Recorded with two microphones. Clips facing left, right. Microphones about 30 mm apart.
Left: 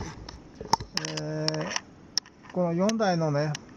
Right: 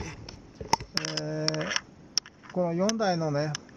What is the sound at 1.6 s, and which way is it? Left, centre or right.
Speech, right.